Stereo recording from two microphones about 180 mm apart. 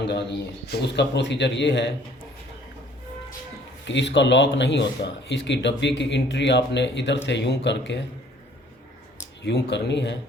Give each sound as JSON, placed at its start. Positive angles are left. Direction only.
{"t": 0.1, "sound": "speech", "side_deg": 65}
{"t": 3.8, "sound": "speech", "side_deg": 80}
{"t": 9.4, "sound": "speech", "side_deg": 75}